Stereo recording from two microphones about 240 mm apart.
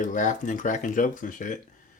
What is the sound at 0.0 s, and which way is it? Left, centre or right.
Speech, left.